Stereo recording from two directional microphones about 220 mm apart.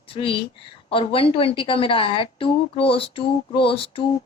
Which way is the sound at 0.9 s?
25° left (ahead or behind).